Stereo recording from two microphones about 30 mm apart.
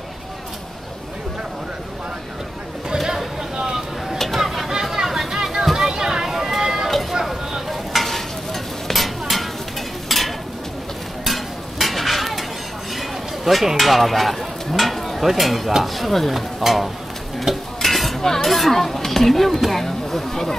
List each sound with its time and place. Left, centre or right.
4.4 s a sound: centre
4.9 s chatter: centre
5.8 s a sound: centre
7.7 s stir: centre
12.9 s a sound: centre
15.2 s speech: centre
17.5 s stir: centre
17.8 s cutlery: centre
18.2 s stir: centre
18.5 s speech: centre